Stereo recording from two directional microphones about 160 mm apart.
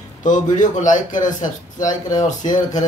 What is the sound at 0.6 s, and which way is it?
Speech, 50° left (ahead or behind).